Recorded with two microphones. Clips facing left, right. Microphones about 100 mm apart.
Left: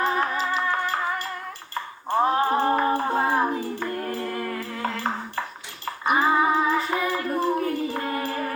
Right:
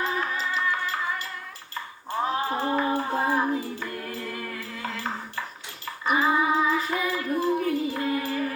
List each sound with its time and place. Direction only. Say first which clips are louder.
0.0 s music: left 4 dB; 45° left (ahead or behind)
1.7 s cutlery: left 6 dB; 45° left (ahead or behind)
3.0 s child singing: left 3 dB; 40° left (ahead or behind)
4.1 s a sound: left 5 dB; 45° left (ahead or behind)
7.2 s music: left 1 dB; 45° left (ahead or behind)